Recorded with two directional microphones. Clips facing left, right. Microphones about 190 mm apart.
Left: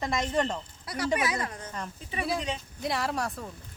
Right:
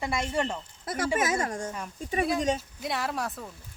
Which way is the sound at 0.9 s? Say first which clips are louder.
Right 1 dB; 45° right (ahead or behind).